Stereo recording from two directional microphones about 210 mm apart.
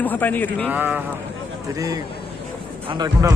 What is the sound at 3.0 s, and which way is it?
Speech, 15° right (ahead or behind).